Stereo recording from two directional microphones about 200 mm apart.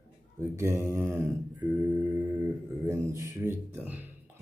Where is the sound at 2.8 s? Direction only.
15° right (ahead or behind).